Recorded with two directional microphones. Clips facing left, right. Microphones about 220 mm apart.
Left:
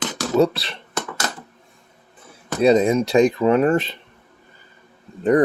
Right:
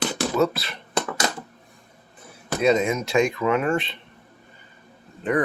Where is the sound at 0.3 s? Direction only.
30° left (ahead or behind).